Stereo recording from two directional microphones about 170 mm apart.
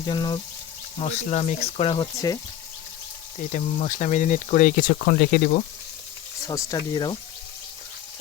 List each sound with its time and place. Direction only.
0.0 s speech: 25° left (ahead or behind)
1.0 s speech: 40° left (ahead or behind)
2.1 s speech: 20° left (ahead or behind)
3.5 s speech: 45° left (ahead or behind)
6.5 s speech: 20° left (ahead or behind)